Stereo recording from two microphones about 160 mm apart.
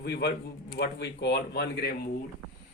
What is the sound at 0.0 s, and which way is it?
Speech, 90° left.